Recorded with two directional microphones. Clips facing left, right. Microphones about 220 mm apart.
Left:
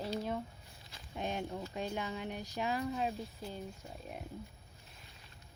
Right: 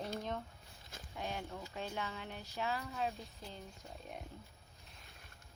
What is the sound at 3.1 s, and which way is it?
Speech, centre (ahead or behind).